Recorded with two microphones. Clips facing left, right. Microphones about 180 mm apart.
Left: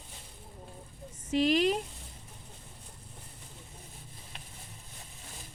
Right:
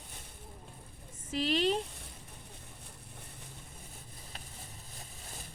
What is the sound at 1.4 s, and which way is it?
Speech, 30° right (ahead or behind).